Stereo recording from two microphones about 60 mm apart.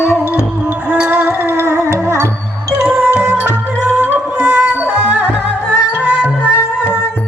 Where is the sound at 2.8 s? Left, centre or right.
Centre.